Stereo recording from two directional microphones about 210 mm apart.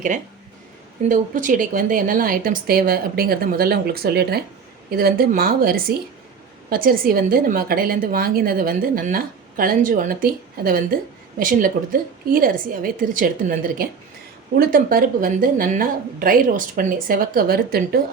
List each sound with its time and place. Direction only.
1.0 s a woman's voice: 40° right (ahead or behind)